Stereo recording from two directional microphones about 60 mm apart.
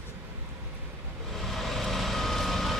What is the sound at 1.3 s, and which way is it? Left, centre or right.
Vehicle, centre.